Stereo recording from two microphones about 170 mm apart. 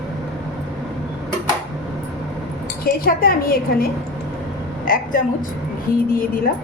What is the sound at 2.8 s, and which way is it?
A woman's voice, 60° left (ahead or behind).